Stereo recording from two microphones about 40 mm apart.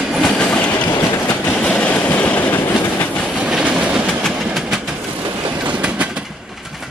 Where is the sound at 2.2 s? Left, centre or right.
Left.